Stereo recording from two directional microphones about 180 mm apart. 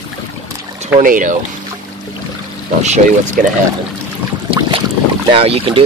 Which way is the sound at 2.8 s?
40° right (ahead or behind).